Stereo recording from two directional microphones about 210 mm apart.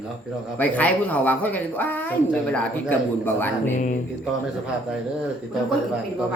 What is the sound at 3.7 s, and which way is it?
Speech, 35° left (ahead or behind).